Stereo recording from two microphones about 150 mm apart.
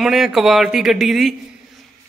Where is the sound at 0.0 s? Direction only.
Centre (ahead or behind).